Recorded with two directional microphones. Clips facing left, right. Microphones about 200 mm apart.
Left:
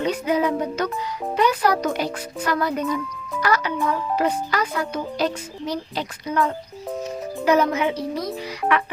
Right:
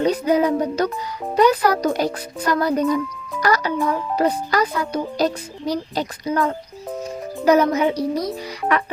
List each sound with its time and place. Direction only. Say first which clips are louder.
0.0 s music: right 4 dB; 40° right (ahead or behind)
1.4 s a child's voice: right 4 dB; 40° right (ahead or behind)
7.4 s a child's voice: right 3 dB; 40° right (ahead or behind)